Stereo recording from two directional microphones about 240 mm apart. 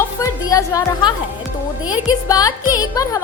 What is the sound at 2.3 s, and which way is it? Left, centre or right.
Speech, centre.